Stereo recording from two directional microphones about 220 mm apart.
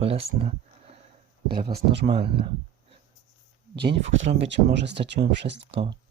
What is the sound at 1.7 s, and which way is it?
Speech, 45° right (ahead or behind).